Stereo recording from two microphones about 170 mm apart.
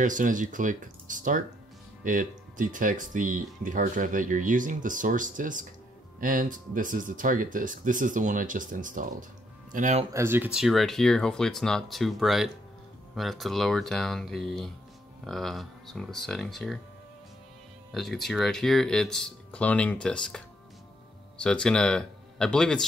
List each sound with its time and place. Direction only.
0.0 s speech: 50° right (ahead or behind)
10.1 s speech: 15° right (ahead or behind)
17.9 s speech: centre (ahead or behind)